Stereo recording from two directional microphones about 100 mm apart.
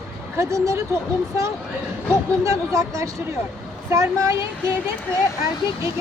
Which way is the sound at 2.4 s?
30° right (ahead or behind).